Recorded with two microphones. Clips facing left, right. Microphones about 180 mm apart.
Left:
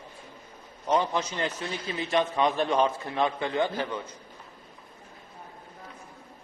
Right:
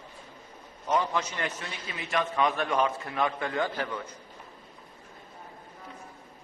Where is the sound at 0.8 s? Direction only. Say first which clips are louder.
Left 2 dB; 25° left (ahead or behind).